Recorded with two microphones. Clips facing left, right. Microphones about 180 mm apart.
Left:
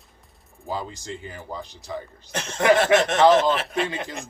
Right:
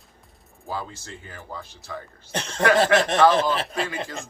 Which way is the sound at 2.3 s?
30° right (ahead or behind).